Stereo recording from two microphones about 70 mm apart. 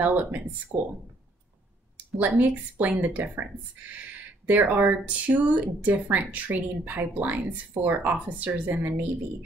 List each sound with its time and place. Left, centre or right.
0.0 s speech: right
0.7 s speech: right
2.1 s speech: right
4.5 s speech: right